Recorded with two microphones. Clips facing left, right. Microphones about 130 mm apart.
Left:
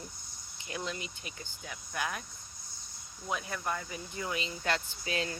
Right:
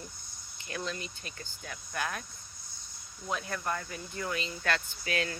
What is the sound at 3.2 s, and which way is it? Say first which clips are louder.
Speech: right 1 dB; 5° left (ahead or behind).